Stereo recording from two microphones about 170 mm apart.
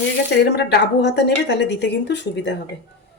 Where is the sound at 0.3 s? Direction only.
85° left.